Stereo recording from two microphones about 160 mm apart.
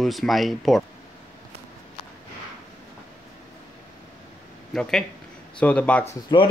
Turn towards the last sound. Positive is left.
turn(degrees=25)  # may be behind; listen again after turning